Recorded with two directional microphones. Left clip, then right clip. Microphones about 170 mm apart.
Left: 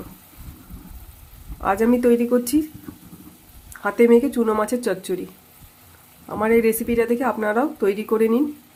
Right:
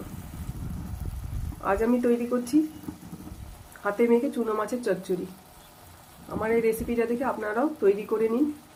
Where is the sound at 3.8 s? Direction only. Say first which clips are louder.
Left 8 dB; 75° left (ahead or behind).